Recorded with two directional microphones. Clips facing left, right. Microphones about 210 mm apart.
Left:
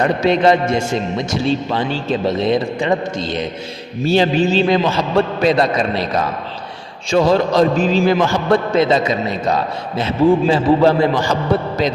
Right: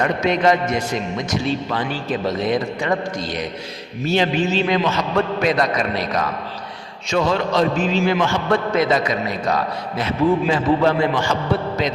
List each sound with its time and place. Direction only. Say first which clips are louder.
0.0 s a man's voice: left 4 dB; 30° left (ahead or behind)